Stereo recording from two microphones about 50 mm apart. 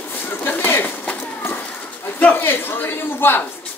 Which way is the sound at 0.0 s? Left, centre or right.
Left.